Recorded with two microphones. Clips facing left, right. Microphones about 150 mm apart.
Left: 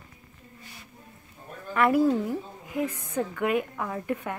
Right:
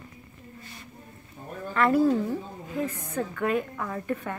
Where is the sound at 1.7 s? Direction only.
10° left (ahead or behind).